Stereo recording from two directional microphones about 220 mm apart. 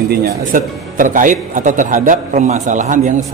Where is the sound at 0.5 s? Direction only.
40° right (ahead or behind).